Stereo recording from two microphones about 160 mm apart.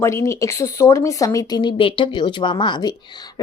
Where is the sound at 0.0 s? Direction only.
15° left (ahead or behind).